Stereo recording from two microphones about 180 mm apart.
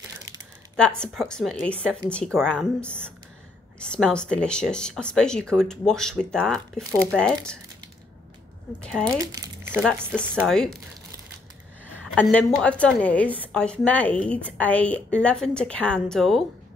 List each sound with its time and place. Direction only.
0.7 s speech: 5° left (ahead or behind)
8.8 s speech: 5° left (ahead or behind)
9.1 s crumpling: 20° right (ahead or behind)
9.9 s speech: 10° right (ahead or behind)
10.4 s speech: centre (ahead or behind)
12.2 s a woman's voice: 5° left (ahead or behind)